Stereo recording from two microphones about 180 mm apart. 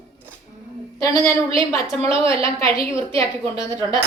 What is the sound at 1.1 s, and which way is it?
A woman's voice, 30° right (ahead or behind).